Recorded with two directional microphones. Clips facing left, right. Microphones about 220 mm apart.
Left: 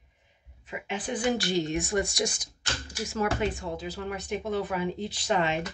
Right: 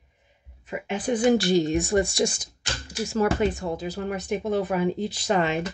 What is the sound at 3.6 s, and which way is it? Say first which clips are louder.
A woman's voice: right 5 dB; 45° right (ahead or behind).